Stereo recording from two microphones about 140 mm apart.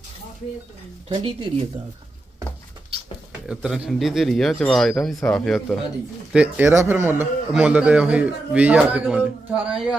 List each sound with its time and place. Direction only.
1.0 s speech: 40° right (ahead or behind)
3.4 s speech: 5° right (ahead or behind)
6.3 s a man's voice: 10° right (ahead or behind)